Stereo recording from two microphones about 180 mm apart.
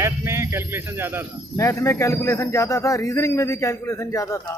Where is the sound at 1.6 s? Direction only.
15° left (ahead or behind).